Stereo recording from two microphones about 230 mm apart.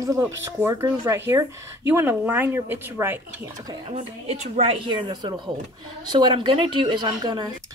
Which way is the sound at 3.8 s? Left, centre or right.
Right.